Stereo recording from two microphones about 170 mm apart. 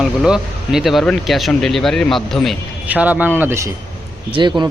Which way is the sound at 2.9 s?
10° right (ahead or behind).